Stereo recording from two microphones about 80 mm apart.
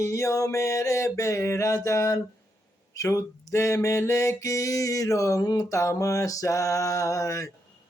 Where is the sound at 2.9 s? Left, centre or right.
Left.